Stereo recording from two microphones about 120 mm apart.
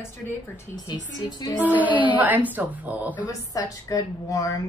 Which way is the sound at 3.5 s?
30° left (ahead or behind).